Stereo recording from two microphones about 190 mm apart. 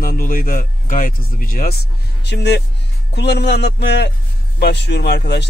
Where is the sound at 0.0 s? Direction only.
50° left (ahead or behind).